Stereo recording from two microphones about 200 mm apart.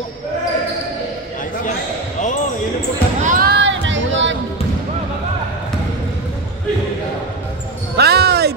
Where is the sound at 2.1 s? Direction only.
40° left (ahead or behind).